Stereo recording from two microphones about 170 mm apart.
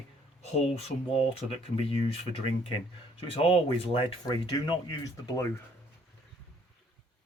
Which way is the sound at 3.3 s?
30° left (ahead or behind).